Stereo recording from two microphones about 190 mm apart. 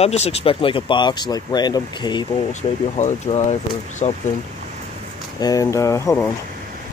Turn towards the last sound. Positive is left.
turn(degrees=10)  # may be behind; listen again after turning